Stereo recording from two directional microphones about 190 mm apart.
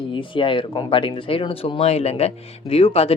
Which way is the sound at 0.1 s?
25° left (ahead or behind).